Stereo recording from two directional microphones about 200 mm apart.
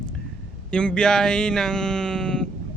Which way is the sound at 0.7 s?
5° left (ahead or behind).